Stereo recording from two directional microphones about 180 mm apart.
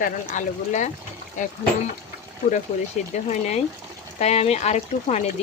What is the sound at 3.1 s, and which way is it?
Speech, 40° left (ahead or behind).